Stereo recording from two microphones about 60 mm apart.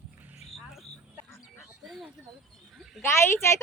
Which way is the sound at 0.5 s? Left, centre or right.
Centre.